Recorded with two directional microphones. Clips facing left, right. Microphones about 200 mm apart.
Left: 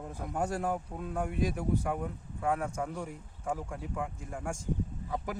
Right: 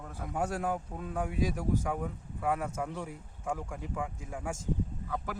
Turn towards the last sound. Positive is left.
turn(degrees=20)  # may be behind; listen again after turning